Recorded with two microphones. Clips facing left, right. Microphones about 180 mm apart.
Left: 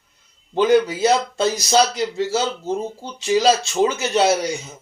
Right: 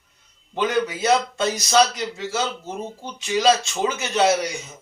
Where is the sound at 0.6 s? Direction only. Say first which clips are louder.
Left 7 dB; 30° left (ahead or behind).